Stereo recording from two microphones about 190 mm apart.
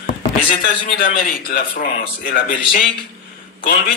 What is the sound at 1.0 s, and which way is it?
A man's voice, 50° left (ahead or behind).